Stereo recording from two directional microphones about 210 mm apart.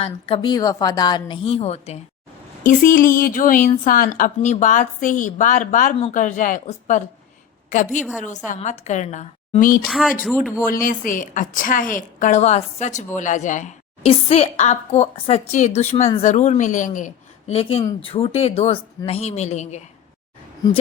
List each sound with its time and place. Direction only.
0.0 s speech: 25° left (ahead or behind)
2.6 s a woman's voice: 40° left (ahead or behind)
8.4 s a woman's voice: 30° left (ahead or behind)
9.8 s speech: centre (ahead or behind)
10.7 s a woman's voice: 40° left (ahead or behind)